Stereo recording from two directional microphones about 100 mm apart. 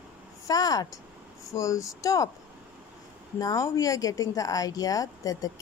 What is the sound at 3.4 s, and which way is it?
A woman's voice, 35° left (ahead or behind).